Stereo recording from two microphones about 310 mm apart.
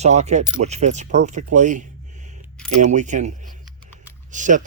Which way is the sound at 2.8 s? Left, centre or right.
Right.